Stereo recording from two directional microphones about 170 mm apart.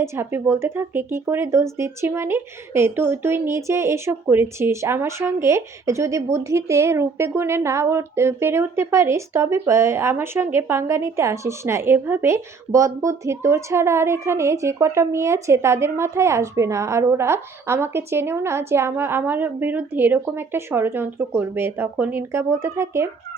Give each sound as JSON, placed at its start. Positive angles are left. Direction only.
{"t": 0.0, "sound": "speech", "side_deg": -15}